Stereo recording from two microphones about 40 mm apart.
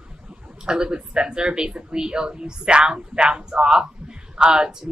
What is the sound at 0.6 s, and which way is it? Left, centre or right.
Speech, right.